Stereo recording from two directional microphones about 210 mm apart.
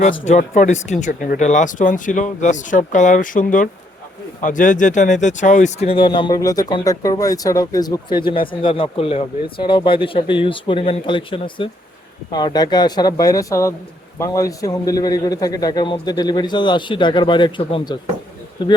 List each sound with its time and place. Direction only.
0.3 s speech: 35° left (ahead or behind)